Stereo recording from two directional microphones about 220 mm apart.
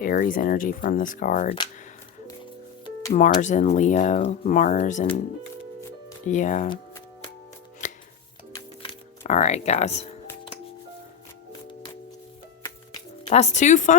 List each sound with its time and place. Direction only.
0.0 s speech: 40° left (ahead or behind)
3.1 s speech: 35° left (ahead or behind)
6.2 s speech: 35° left (ahead or behind)
7.8 s music: 35° left (ahead or behind)
8.8 s a sound: 30° left (ahead or behind)
13.2 s speech: 30° left (ahead or behind)